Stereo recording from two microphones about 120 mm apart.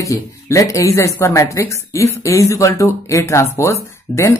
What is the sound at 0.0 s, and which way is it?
Speech, 25° left (ahead or behind).